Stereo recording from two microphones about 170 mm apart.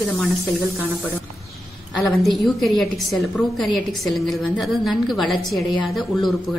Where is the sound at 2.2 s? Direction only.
Centre (ahead or behind).